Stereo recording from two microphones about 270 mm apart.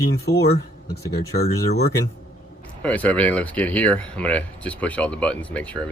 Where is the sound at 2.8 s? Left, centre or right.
Centre.